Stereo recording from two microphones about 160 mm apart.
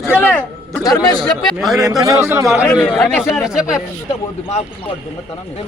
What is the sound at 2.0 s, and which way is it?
Speech, 20° right (ahead or behind).